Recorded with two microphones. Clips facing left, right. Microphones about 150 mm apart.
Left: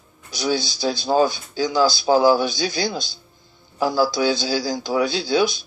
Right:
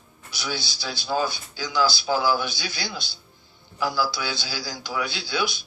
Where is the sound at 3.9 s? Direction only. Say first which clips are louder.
Left 10 dB; 45° left (ahead or behind).